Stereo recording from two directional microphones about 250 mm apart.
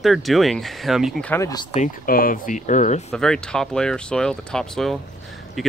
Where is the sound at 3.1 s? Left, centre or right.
Centre.